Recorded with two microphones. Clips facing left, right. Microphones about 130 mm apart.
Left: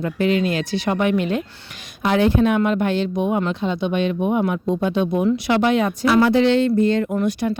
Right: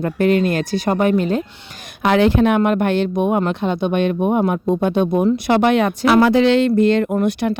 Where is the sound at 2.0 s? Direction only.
85° right.